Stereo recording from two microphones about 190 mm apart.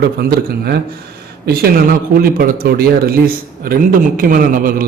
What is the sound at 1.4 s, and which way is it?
Speech, 55° right (ahead or behind).